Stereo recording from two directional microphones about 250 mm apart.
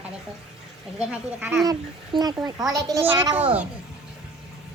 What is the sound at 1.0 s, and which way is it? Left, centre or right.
A woman's voice, centre.